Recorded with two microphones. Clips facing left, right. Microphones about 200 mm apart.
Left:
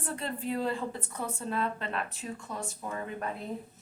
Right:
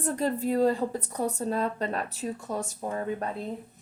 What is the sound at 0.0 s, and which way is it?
A woman's voice, 40° right (ahead or behind).